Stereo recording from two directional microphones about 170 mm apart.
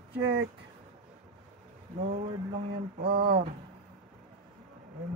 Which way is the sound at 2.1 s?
60° right (ahead or behind).